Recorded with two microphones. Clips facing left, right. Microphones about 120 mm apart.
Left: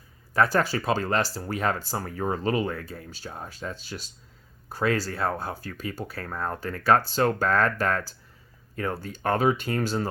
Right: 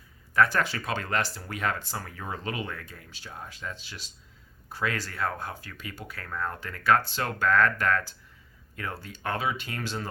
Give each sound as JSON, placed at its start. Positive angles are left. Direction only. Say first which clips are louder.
{"t": 0.3, "sound": "speech", "louder": "left 2 dB", "side_deg": 35}